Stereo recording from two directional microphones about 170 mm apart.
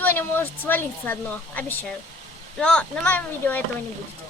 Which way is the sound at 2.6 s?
5° left (ahead or behind).